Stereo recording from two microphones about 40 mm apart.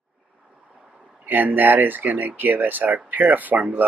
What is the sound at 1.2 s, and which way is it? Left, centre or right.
Speech, right.